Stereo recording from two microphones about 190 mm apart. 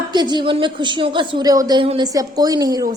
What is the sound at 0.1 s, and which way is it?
A woman's voice, 25° right (ahead or behind).